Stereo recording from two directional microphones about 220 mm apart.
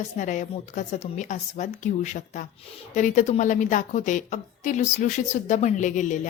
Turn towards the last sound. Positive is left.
turn(degrees=35)  # may be behind; listen again after turning